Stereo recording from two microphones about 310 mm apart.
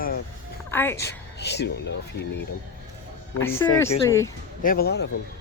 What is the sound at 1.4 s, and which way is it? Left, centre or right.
Speech, left.